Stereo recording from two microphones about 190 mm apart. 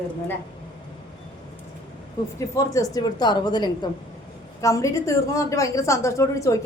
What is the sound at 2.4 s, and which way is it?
A woman's voice, 15° left (ahead or behind).